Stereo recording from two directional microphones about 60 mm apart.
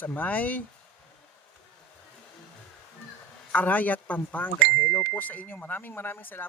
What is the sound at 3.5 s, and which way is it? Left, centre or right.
Speech, left.